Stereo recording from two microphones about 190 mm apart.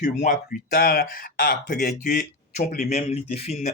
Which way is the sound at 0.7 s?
55° left (ahead or behind).